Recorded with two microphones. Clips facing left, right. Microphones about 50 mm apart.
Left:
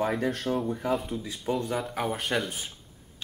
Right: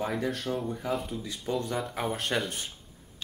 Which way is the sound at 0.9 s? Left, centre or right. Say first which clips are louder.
Left 2 dB; centre.